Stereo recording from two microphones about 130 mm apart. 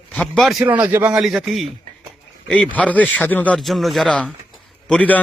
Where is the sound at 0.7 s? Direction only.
10° right (ahead or behind).